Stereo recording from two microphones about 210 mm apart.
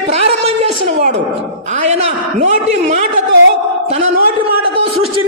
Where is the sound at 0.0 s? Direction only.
30° right (ahead or behind).